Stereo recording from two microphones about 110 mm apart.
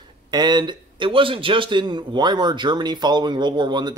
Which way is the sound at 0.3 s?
40° right (ahead or behind).